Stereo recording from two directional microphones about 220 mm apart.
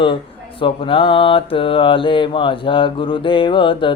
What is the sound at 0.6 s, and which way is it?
Mantra, 25° left (ahead or behind).